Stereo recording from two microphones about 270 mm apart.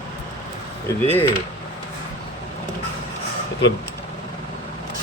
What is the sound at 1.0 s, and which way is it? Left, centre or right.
Speech, centre.